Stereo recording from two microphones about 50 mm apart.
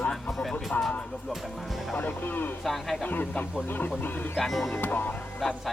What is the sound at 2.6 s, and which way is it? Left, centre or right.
Speech, centre.